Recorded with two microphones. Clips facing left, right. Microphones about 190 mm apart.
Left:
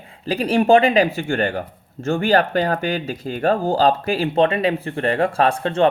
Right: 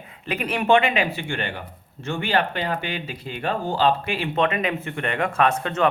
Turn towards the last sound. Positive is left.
turn(degrees=30)  # may be behind; listen again after turning